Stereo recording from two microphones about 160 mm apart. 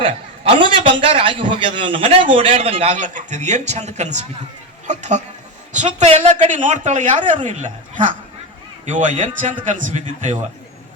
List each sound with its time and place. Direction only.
0.0 s a man's voice: 35° right (ahead or behind); by 10.3 s 50° right (ahead or behind)